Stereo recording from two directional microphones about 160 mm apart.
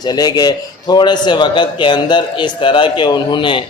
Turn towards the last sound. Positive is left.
turn(degrees=30)  # may be behind; listen again after turning